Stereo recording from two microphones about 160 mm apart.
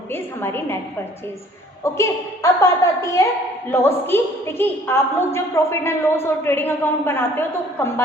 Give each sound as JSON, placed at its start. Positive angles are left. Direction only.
{"t": 0.1, "sound": "a woman's voice", "side_deg": 15}
{"t": 1.8, "sound": "a woman's voice", "side_deg": 20}